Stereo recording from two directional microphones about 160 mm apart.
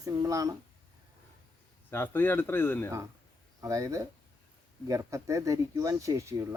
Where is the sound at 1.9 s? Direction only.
10° left (ahead or behind).